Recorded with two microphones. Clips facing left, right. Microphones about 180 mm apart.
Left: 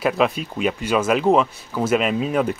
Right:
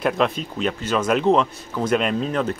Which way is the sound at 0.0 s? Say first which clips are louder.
Left 1 dB; 5° left (ahead or behind).